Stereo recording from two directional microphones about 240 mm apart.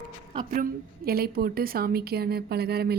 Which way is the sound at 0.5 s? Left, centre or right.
Right.